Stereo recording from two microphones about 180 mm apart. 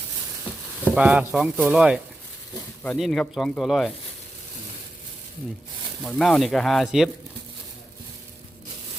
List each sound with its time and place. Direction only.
0.9 s speech: 5° right (ahead or behind)
6.0 s speech: centre (ahead or behind)